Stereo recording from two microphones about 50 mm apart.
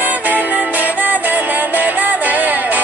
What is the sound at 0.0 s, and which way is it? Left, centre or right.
Music, right.